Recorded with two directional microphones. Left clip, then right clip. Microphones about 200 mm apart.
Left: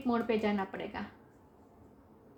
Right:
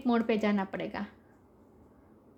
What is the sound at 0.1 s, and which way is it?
Speech, 55° right (ahead or behind).